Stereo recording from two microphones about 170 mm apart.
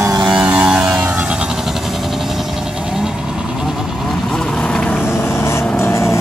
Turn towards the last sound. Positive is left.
turn(degrees=15)  # may be behind; listen again after turning